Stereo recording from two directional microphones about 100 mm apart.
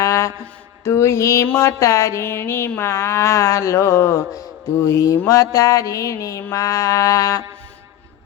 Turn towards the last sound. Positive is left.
turn(degrees=35)  # may be behind; listen again after turning